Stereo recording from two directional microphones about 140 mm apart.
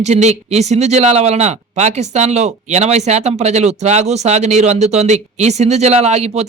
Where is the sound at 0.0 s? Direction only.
55° right (ahead or behind).